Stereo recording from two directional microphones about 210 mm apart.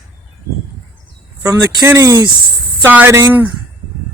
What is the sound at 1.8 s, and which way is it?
Speech, 15° right (ahead or behind).